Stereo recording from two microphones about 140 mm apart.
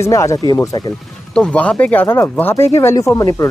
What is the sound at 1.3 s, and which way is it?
Speech, 10° left (ahead or behind).